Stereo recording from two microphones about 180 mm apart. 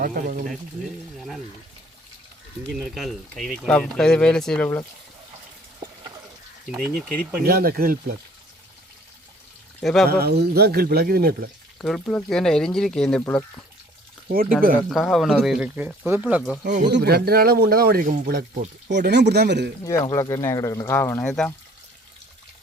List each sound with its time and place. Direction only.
0.0 s speech: 55° right (ahead or behind)
2.9 s speech: centre (ahead or behind)
6.7 s speech: centre (ahead or behind)
7.4 s speech: 55° right (ahead or behind)
9.8 s speech: centre (ahead or behind)
10.1 s speech: 60° right (ahead or behind)
11.8 s speech: 5° left (ahead or behind)
14.8 s speech: centre (ahead or behind)
16.9 s speech: 65° right (ahead or behind)
18.9 s speech: 70° right (ahead or behind)
19.8 s speech: 20° left (ahead or behind)